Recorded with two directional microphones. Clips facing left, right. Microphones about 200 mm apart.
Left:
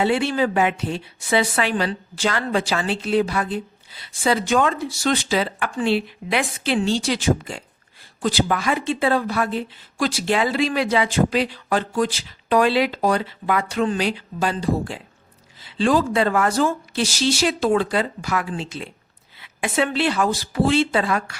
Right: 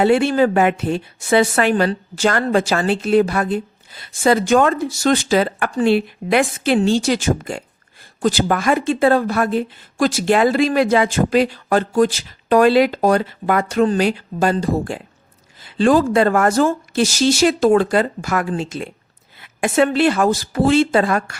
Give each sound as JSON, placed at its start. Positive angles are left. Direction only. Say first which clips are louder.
{"t": 0.0, "sound": "a woman's voice", "louder": "right 6 dB", "side_deg": -50}